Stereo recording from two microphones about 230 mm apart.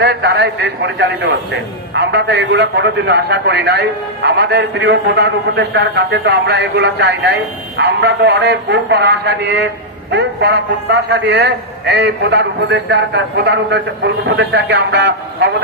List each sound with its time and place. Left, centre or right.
0.0 s a man's voice: right